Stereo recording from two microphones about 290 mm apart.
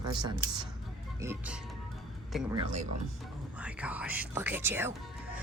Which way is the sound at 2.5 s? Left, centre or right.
Right.